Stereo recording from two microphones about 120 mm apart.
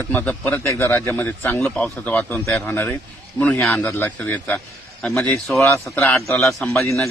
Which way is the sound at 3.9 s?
15° left (ahead or behind).